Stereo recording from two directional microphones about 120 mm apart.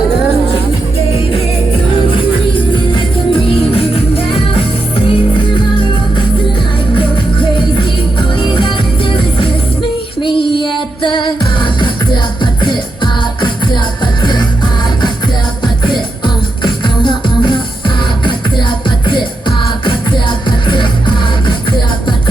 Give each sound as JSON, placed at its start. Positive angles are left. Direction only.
{"t": 2.9, "sound": "music", "side_deg": 50}
{"t": 8.4, "sound": "music", "side_deg": 40}
{"t": 15.6, "sound": "music", "side_deg": 40}